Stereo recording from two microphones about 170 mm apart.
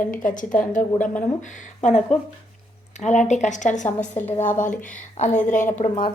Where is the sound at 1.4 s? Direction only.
45° left (ahead or behind).